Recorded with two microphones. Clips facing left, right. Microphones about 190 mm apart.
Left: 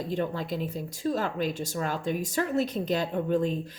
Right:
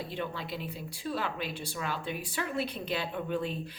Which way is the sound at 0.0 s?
45° left (ahead or behind).